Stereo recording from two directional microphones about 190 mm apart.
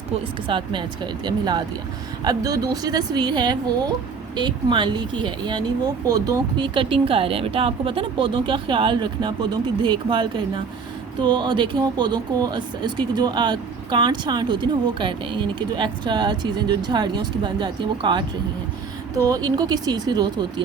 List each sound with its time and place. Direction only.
0.4 s speech: 25° right (ahead or behind)